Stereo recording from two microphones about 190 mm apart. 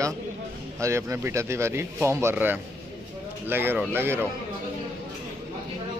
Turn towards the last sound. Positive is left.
turn(degrees=-10)  # may be behind; listen again after turning